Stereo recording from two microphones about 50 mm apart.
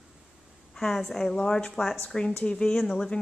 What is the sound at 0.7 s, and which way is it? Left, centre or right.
Speech, centre.